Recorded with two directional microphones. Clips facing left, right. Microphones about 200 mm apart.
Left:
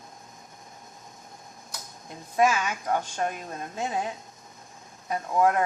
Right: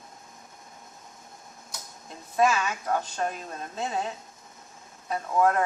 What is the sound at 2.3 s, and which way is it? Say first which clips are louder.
Speech: even; 15° left (ahead or behind).